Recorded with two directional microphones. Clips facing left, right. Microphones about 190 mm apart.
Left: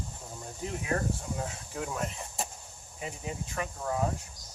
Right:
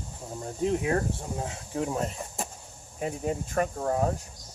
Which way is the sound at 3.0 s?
50° right (ahead or behind).